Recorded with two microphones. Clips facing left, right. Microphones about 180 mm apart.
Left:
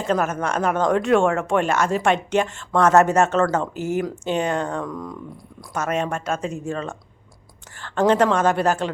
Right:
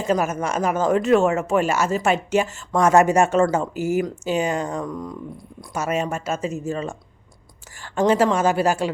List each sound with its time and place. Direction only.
0.0 s speech: 10° right (ahead or behind)